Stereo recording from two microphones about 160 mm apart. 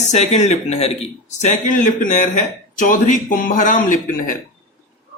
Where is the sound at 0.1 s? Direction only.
45° left (ahead or behind).